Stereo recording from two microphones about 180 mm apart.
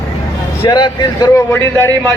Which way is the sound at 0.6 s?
25° left (ahead or behind).